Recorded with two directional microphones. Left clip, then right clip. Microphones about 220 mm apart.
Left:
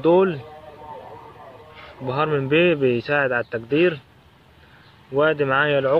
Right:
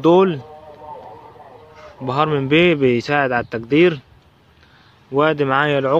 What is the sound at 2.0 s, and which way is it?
Speech, 35° right (ahead or behind).